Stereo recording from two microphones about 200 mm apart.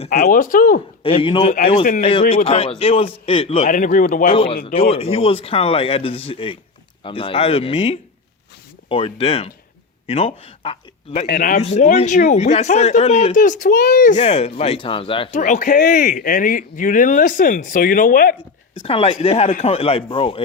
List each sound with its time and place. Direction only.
0.2 s speech: 45° left (ahead or behind)
1.0 s a man's voice: 25° left (ahead or behind)
3.7 s speech: 40° left (ahead or behind)
4.3 s a man's voice: 30° left (ahead or behind)
11.3 s speech: 45° left (ahead or behind)
11.6 s speech: 35° left (ahead or behind)
18.8 s a man's voice: 30° left (ahead or behind)
19.5 s speech: 40° left (ahead or behind)
19.7 s a man's voice: 30° left (ahead or behind)